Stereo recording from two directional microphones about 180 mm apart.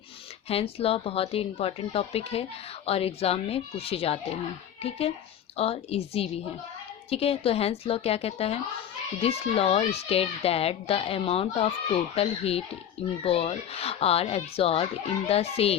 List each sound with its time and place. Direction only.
0.4 s a woman's voice: 35° left (ahead or behind)